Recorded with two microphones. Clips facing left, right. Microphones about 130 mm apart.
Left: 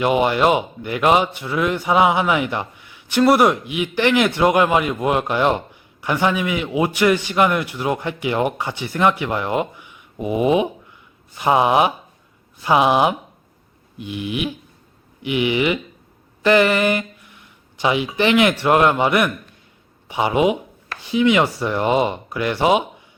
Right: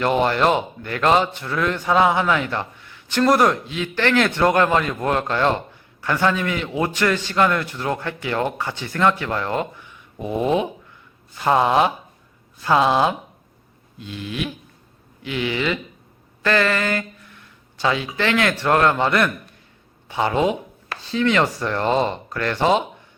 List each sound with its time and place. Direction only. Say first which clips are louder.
0.0 s a man's voice: left 2 dB; 10° left (ahead or behind)